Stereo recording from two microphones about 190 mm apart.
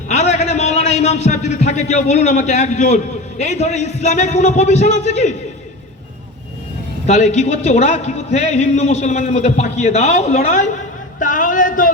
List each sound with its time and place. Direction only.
0.1 s a man's voice: 35° left (ahead or behind)
7.1 s a man's voice: 35° left (ahead or behind)
11.2 s a sound: 45° left (ahead or behind)